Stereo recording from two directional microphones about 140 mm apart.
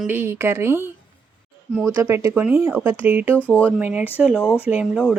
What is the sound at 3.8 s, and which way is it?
Speech, 10° right (ahead or behind).